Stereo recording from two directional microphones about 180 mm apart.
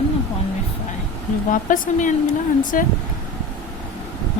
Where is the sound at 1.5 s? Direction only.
50° left (ahead or behind).